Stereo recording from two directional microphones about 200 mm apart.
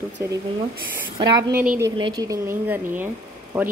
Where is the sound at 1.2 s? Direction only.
15° right (ahead or behind).